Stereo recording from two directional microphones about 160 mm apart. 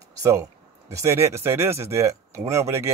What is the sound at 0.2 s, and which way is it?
Speech, 20° right (ahead or behind).